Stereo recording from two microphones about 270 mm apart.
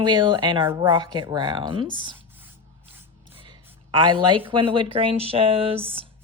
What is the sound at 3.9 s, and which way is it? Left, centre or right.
Speech, centre.